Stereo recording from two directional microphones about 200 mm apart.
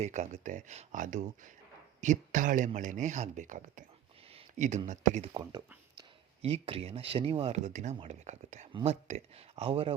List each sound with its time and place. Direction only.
0.0 s speech: 35° right (ahead or behind)
4.4 s a sound: 35° right (ahead or behind)
4.9 s speech: 35° right (ahead or behind)
5.3 s speech: 20° right (ahead or behind)